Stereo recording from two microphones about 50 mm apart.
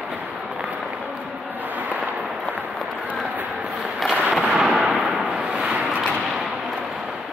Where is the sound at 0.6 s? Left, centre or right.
Right.